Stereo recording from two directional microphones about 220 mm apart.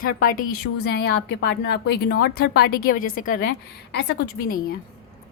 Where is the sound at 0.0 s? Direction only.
40° left (ahead or behind).